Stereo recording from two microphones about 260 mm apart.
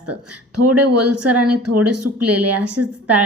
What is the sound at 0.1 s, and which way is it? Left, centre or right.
A woman's voice, right.